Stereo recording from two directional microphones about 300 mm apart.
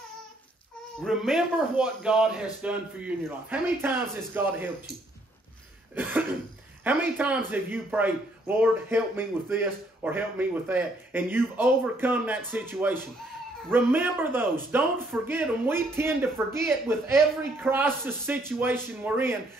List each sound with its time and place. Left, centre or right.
1.0 s a man's voice: centre
5.9 s a man's voice: centre